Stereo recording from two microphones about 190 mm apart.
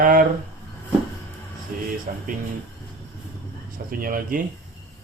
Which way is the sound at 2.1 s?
45° right (ahead or behind).